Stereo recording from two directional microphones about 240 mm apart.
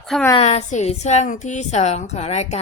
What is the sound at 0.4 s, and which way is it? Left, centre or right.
Speech, left.